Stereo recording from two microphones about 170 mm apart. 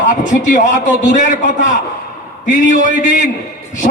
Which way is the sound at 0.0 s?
50° left (ahead or behind).